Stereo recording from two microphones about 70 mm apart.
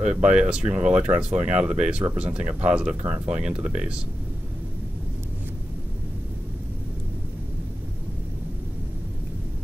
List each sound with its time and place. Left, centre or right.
0.0 s speech: centre